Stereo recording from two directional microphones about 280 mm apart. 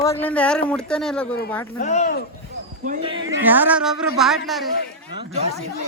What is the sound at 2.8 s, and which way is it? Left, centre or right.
Speech, centre.